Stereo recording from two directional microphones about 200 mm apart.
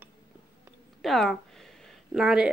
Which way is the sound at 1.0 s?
Centre (ahead or behind).